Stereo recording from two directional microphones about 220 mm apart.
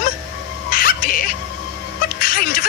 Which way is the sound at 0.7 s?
40° left (ahead or behind).